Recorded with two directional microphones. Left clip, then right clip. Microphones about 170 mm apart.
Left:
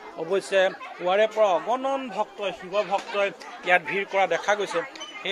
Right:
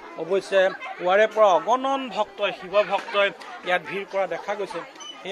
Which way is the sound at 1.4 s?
25° right (ahead or behind).